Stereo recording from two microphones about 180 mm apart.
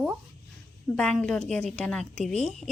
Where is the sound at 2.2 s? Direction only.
40° right (ahead or behind).